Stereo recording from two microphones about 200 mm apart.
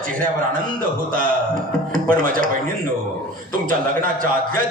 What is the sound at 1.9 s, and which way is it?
Speech, 45° right (ahead or behind).